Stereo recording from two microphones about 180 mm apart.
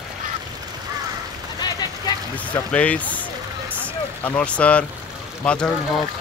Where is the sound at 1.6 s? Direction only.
20° left (ahead or behind).